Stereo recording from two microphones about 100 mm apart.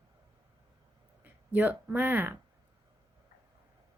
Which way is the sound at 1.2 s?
15° right (ahead or behind).